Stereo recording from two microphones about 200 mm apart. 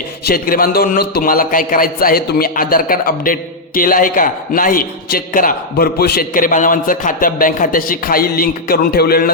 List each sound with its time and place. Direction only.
0.3 s a man's voice: 45° left (ahead or behind)